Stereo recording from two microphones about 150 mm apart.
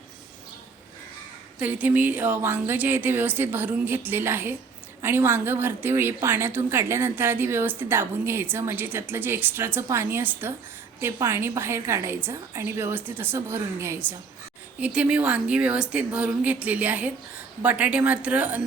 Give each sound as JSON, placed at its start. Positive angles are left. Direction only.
{"t": 1.5, "sound": "a woman's voice", "side_deg": -10}